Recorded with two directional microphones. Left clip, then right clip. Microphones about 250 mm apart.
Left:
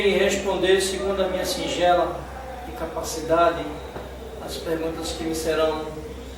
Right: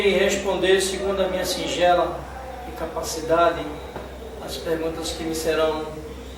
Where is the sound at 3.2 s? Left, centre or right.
Centre.